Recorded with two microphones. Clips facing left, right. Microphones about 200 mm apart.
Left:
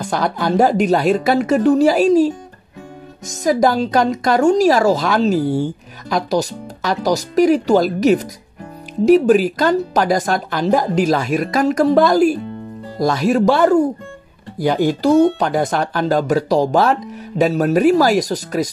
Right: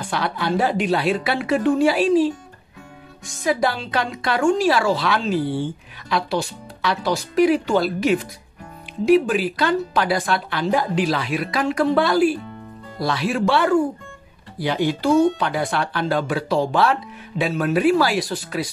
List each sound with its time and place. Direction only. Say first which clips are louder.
0.0 s a woman's voice: left 5 dB; 45° left (ahead or behind)